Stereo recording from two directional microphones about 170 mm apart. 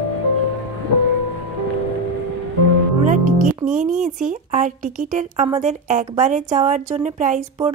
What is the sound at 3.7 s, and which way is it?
A woman's voice, 50° right (ahead or behind).